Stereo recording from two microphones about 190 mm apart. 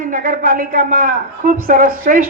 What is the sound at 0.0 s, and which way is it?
A woman's voice, 45° right (ahead or behind).